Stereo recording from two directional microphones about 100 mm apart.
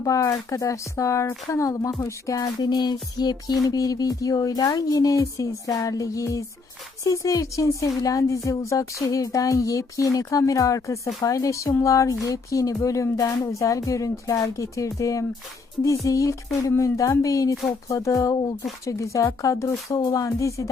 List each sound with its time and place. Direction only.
0.0 s speech: 35° left (ahead or behind)